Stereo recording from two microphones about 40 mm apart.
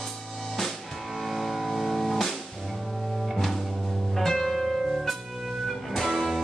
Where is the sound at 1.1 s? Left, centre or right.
Centre.